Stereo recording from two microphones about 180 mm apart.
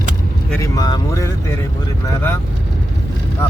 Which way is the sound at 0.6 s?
20° left (ahead or behind).